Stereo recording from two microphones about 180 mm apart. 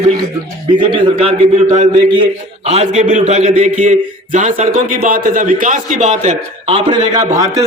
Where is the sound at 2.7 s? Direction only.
35° right (ahead or behind); by 7.6 s 20° right (ahead or behind).